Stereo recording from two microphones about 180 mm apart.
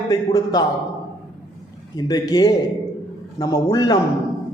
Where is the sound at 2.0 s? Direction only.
20° left (ahead or behind).